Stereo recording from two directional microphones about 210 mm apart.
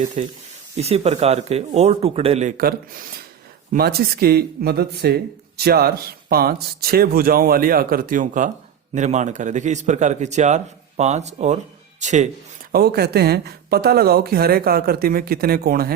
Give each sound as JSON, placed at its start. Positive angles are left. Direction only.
{"t": 0.2, "sound": "a man's voice", "side_deg": -30}
{"t": 12.7, "sound": "speech", "side_deg": -50}